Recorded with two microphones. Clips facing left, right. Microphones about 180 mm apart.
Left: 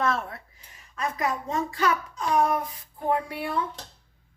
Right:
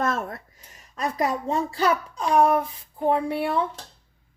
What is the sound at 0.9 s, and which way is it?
A child's voice, 35° right (ahead or behind).